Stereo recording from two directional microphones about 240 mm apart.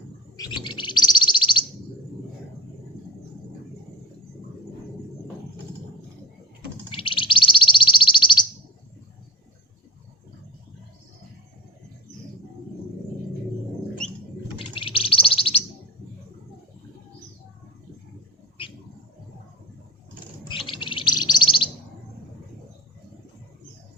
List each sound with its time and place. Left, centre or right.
0.3 s bird: centre
6.9 s bird: left
14.0 s a sound: centre
14.6 s bird: left
20.5 s a sound: centre
20.8 s chirp: centre